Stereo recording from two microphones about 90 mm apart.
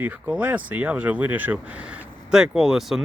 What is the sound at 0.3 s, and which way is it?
Speech, 15° right (ahead or behind).